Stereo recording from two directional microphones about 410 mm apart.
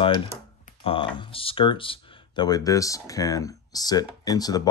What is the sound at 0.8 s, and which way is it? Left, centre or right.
Speech, centre.